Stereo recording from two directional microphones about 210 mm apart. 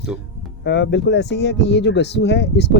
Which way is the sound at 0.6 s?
55° left (ahead or behind).